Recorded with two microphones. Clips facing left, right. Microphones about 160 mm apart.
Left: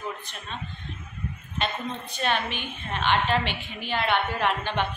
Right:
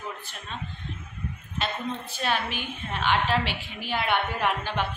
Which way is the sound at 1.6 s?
5° right (ahead or behind).